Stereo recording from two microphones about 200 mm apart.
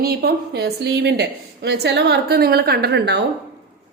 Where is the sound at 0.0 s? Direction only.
50° right (ahead or behind).